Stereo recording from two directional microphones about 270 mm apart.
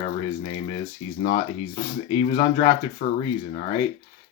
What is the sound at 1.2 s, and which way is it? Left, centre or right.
Speech, left.